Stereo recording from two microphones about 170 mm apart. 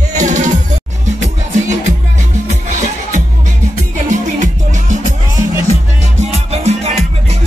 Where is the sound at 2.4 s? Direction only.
45° right (ahead or behind).